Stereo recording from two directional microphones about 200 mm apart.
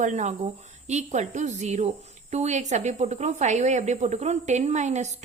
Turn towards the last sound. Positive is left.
turn(degrees=-35)  # may be behind; listen again after turning